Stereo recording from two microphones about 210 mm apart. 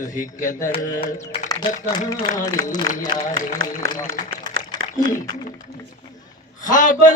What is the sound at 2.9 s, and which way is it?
Speech, 75° right (ahead or behind).